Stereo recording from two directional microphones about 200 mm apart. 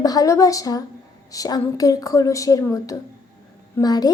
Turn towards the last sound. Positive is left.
turn(degrees=20)  # may be behind; listen again after turning